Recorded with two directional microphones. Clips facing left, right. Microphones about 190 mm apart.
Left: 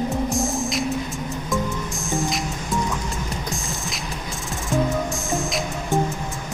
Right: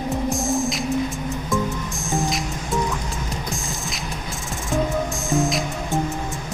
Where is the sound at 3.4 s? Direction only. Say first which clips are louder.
Even; centre (ahead or behind).